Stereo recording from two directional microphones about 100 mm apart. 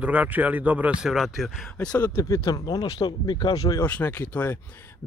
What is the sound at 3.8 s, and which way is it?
Speech, 15° left (ahead or behind).